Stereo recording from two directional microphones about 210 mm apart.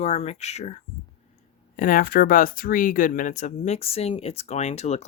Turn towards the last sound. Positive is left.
turn(degrees=30)  # may be behind; listen again after turning